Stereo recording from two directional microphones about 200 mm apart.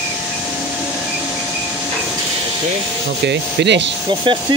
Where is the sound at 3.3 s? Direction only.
60° right (ahead or behind).